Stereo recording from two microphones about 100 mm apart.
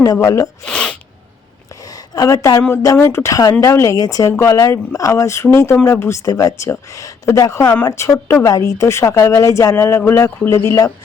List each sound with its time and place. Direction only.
0.0 s speech: 35° left (ahead or behind)
0.6 s sneeze: 10° left (ahead or behind)
1.8 s a sound: 40° left (ahead or behind)
2.8 s speech: 30° left (ahead or behind)